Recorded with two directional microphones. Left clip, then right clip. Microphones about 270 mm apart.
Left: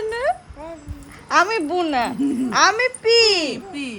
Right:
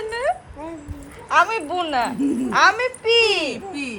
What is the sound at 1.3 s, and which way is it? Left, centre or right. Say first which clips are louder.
A woman's voice: even; left.